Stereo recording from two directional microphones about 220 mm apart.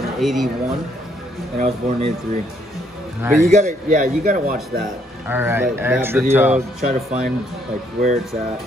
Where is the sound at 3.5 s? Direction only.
30° right (ahead or behind).